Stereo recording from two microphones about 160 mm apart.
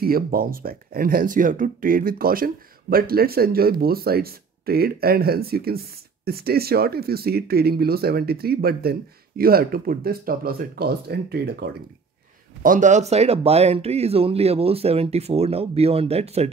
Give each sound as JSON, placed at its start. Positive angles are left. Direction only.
{"t": 0.0, "sound": "speech", "side_deg": -65}
{"t": 12.6, "sound": "speech", "side_deg": -55}